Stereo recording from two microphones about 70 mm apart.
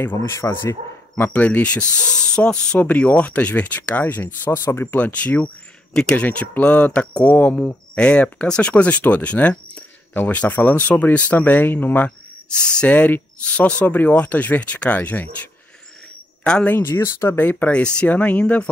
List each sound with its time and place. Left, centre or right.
0.0 s speech: left
1.2 s speech: left
6.2 s speech: left
12.6 s speech: centre
16.4 s speech: centre
16.7 s speech: left
17.3 s speech: left